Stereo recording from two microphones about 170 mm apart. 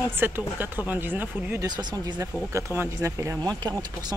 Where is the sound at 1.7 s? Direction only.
25° right (ahead or behind).